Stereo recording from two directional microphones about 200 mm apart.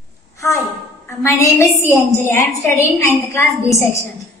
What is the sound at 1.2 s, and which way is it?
A woman's voice, 15° left (ahead or behind).